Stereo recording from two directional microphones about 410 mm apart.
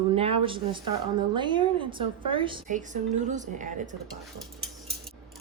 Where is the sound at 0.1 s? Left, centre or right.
Centre.